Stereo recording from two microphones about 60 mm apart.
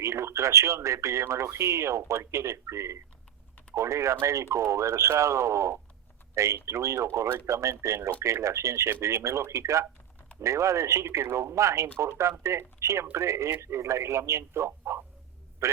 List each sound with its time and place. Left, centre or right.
0.0 s a man's voice: right